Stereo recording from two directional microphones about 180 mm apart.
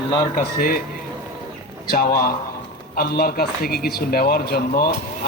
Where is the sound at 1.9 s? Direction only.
55° left (ahead or behind).